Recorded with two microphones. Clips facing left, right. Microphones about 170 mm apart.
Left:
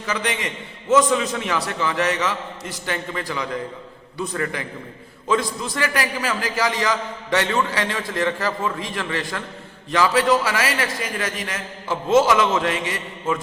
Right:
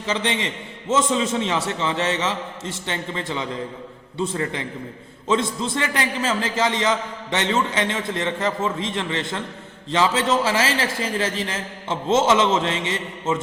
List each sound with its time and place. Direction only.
0.0 s a man's voice: 25° right (ahead or behind)